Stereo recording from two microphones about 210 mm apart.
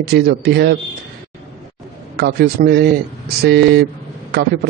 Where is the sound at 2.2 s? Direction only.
50° right (ahead or behind).